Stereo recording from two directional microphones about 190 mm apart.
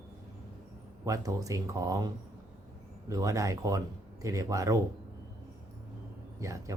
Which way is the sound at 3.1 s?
15° right (ahead or behind).